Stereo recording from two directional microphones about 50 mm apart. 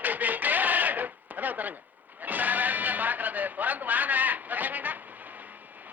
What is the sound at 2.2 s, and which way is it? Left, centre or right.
Music, right.